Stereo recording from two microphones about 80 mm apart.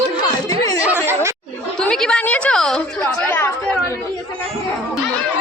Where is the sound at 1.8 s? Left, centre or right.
Centre.